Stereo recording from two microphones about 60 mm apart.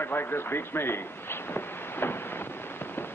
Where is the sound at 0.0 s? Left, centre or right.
Left.